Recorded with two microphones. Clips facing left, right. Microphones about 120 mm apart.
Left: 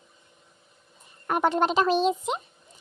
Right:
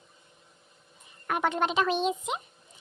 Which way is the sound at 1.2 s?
35° left (ahead or behind).